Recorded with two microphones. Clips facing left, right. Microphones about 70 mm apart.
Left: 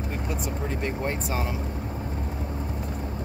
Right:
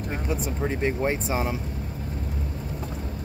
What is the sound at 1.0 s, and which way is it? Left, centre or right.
Speech, centre.